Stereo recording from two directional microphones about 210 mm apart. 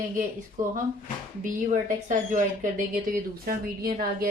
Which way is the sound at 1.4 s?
35° right (ahead or behind).